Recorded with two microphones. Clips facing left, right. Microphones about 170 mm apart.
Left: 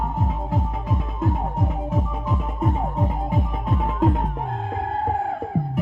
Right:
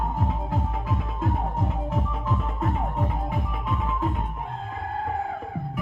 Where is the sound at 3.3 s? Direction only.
45° left (ahead or behind).